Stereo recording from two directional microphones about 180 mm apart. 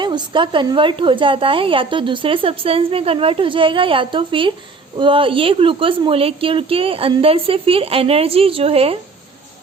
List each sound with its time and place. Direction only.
0.0 s a woman's voice: 25° right (ahead or behind)